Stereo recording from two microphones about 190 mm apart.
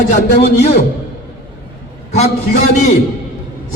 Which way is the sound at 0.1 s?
40° left (ahead or behind).